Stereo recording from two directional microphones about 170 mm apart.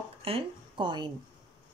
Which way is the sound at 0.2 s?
30° right (ahead or behind).